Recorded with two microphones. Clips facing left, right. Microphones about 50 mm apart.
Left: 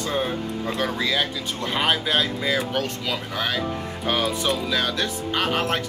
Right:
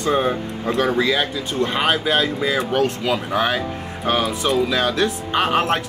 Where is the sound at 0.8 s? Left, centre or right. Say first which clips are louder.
Right 5 dB; centre.